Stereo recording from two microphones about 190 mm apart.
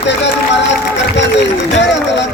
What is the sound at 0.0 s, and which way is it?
Run, 70° left (ahead or behind).